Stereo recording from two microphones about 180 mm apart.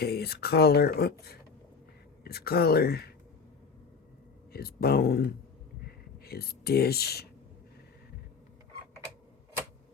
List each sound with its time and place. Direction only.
0.0 s speech: 60° left (ahead or behind)
2.2 s speech: 60° left (ahead or behind)
4.5 s speech: 60° left (ahead or behind)